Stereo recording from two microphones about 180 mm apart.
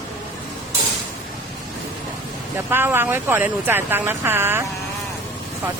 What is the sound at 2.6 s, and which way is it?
Speech, 10° right (ahead or behind).